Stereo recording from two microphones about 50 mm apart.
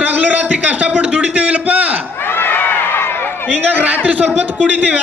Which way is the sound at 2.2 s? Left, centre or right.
Left.